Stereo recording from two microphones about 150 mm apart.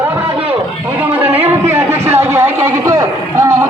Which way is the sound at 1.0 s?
10° right (ahead or behind).